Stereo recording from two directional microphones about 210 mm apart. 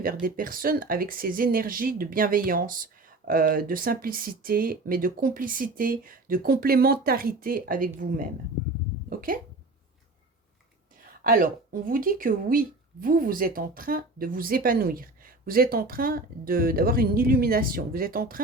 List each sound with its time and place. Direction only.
0.0 s speech: 40° right (ahead or behind)
9.0 s hiccup: 40° right (ahead or behind)
11.0 s speech: 40° right (ahead or behind)